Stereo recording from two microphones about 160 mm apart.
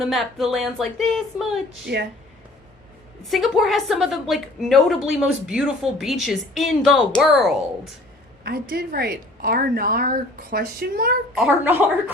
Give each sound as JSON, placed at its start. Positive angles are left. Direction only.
{"t": 0.0, "sound": "a woman's voice", "side_deg": 0}
{"t": 1.9, "sound": "speech", "side_deg": -85}
{"t": 3.2, "sound": "a woman's voice", "side_deg": 0}
{"t": 8.4, "sound": "a woman's voice", "side_deg": -80}
{"t": 11.3, "sound": "a woman's voice", "side_deg": -10}